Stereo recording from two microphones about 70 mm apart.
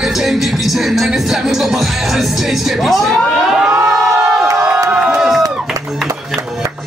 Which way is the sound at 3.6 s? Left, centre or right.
Right.